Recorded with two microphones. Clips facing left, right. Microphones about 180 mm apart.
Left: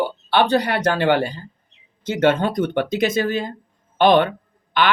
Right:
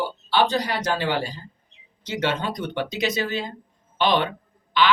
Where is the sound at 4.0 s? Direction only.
50° left (ahead or behind).